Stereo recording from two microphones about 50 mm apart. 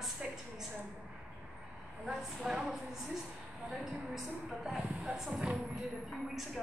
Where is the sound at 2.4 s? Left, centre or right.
Centre.